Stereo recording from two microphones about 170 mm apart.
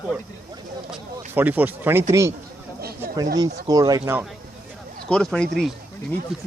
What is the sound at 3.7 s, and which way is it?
Speech, 20° right (ahead or behind).